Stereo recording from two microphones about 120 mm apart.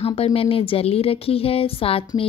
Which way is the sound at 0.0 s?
50° left (ahead or behind).